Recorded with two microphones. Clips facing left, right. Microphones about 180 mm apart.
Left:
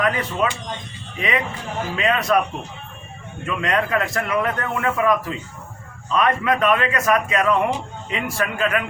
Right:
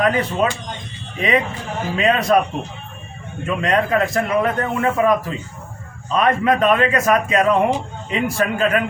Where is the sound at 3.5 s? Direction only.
30° right (ahead or behind).